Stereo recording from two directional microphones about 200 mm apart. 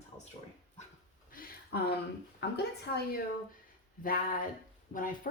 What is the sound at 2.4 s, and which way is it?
Speech, 60° left (ahead or behind).